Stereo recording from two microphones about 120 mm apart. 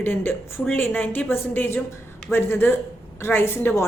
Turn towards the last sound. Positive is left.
turn(degrees=20)  # may be behind; listen again after turning